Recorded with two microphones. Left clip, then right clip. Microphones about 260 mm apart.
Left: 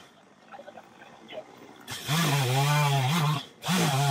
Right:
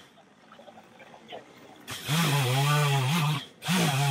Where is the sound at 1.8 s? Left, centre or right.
Centre.